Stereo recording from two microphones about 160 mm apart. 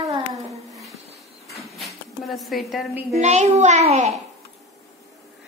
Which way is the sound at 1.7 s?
Centre (ahead or behind).